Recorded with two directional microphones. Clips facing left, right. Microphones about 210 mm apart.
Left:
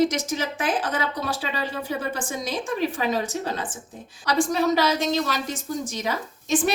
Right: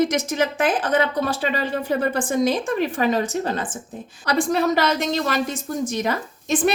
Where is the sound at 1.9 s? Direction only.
55° right (ahead or behind).